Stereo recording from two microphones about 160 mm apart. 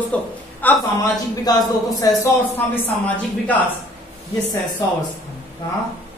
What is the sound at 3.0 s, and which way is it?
Speech, 10° left (ahead or behind).